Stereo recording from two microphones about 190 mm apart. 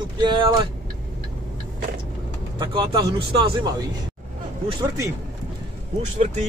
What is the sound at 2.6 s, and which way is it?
Speech, 25° right (ahead or behind).